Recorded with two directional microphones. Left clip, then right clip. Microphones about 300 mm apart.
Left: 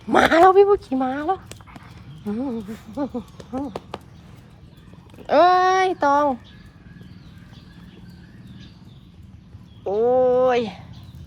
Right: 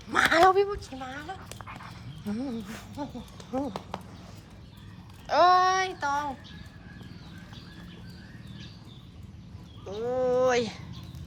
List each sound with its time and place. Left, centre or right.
0.1 s speech: centre
5.2 s speech: centre
9.8 s speech: centre